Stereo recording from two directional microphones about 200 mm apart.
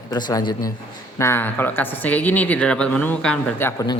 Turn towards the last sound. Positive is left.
turn(degrees=15)  # may be behind; listen again after turning